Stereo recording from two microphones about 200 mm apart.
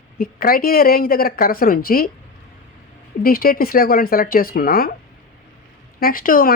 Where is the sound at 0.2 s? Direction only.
45° left (ahead or behind).